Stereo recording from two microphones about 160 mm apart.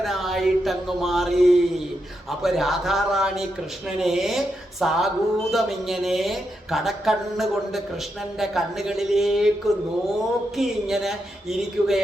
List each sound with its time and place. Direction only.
0.0 s a sound: centre (ahead or behind)
2.4 s speech: centre (ahead or behind)
10.6 s speech: centre (ahead or behind)